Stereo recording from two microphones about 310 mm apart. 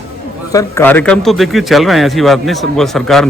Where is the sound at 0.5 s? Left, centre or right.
Centre.